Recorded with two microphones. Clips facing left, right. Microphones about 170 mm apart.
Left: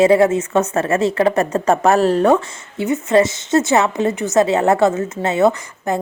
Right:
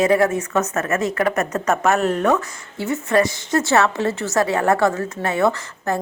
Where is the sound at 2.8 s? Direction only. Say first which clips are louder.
Left 4 dB; 20° left (ahead or behind).